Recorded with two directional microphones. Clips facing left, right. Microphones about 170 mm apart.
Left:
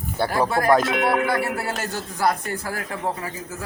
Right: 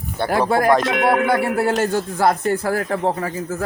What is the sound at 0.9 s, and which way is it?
Speech, 55° right (ahead or behind).